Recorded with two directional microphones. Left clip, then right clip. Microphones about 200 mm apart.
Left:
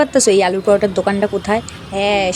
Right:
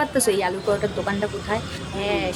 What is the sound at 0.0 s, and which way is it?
A woman's voice, 25° left (ahead or behind).